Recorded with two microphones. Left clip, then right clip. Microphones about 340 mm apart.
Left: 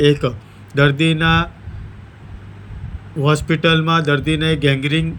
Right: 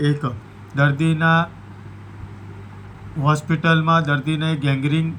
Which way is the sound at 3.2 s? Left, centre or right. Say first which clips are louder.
Left 3 dB; centre.